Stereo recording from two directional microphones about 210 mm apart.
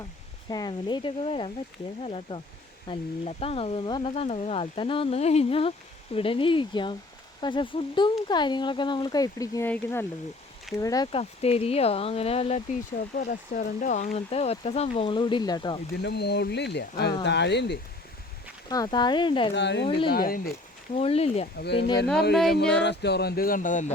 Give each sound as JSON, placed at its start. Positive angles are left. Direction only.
{"t": 0.5, "sound": "speech", "side_deg": 20}
{"t": 13.1, "sound": "speech", "side_deg": 40}
{"t": 16.0, "sound": "speech", "side_deg": 50}
{"t": 18.7, "sound": "speech", "side_deg": 20}
{"t": 19.5, "sound": "speech", "side_deg": 55}
{"t": 19.9, "sound": "speech", "side_deg": 25}
{"t": 20.1, "sound": "speech", "side_deg": 45}
{"t": 20.9, "sound": "speech", "side_deg": 30}
{"t": 21.6, "sound": "speech", "side_deg": 55}